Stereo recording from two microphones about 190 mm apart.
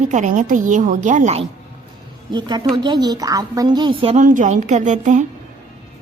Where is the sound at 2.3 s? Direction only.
25° right (ahead or behind); by 5.2 s 40° right (ahead or behind).